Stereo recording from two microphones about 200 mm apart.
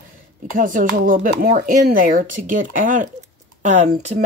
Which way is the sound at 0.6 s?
40° right (ahead or behind).